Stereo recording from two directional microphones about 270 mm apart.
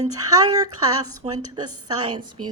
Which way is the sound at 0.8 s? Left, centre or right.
Right.